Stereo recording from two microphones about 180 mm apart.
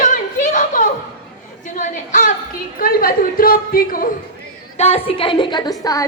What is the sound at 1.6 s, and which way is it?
Chatter, 45° left (ahead or behind).